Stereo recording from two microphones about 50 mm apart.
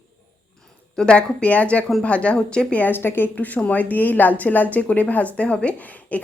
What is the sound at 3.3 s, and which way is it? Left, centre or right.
A woman's voice, left.